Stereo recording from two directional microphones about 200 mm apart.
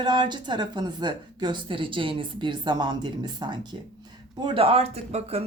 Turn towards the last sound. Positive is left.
turn(degrees=-30)  # may be behind; listen again after turning